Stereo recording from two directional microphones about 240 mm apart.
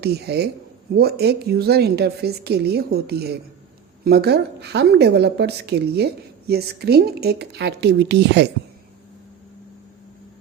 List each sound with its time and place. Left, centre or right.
0.0 s a woman's voice: right